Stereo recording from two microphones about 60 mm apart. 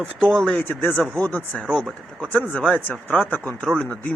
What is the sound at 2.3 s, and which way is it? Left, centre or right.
Speech, left.